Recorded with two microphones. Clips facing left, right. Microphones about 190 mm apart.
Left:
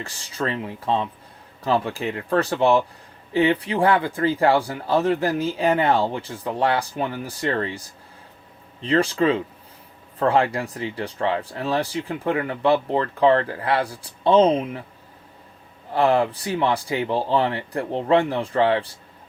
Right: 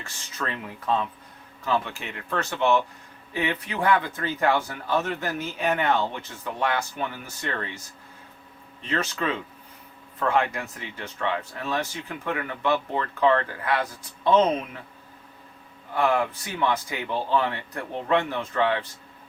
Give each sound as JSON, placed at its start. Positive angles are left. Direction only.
{"t": 0.0, "sound": "speech", "side_deg": 35}
{"t": 8.8, "sound": "speech", "side_deg": 30}
{"t": 15.9, "sound": "speech", "side_deg": 35}